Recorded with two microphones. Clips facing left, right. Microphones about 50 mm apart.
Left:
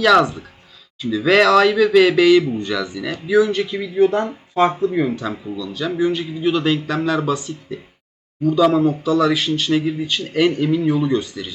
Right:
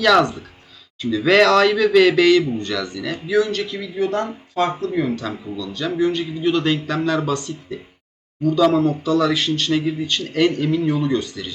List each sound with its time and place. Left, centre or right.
0.0 s a man's voice: centre